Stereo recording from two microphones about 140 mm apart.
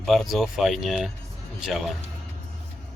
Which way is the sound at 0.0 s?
Centre (ahead or behind).